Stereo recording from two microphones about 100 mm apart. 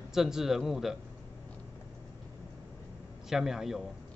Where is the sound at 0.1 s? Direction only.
5° right (ahead or behind).